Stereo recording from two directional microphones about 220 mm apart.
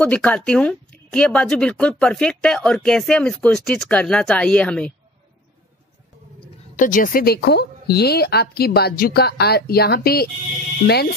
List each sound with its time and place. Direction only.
0.0 s speech: 5° left (ahead or behind)
6.8 s a woman's voice: 40° left (ahead or behind)